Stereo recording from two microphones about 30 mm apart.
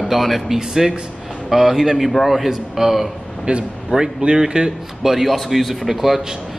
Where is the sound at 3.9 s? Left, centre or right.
Centre.